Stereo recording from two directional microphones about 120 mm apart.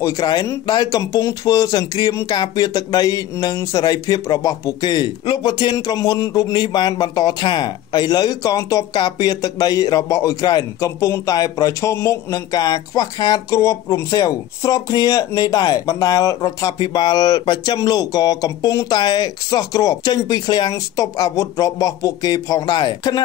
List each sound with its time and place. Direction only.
0.0 s speech: 30° left (ahead or behind)